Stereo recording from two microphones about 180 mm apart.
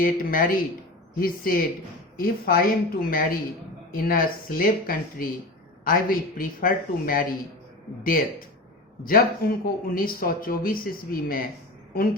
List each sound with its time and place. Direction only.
0.0 s speech: 50° left (ahead or behind)